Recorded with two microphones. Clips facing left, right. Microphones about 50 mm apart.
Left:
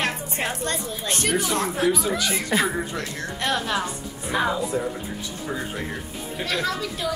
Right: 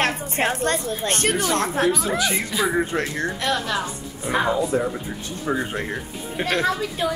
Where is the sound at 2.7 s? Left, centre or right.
Right.